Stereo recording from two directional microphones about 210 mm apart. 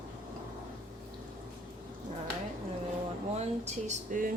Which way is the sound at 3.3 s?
30° right (ahead or behind).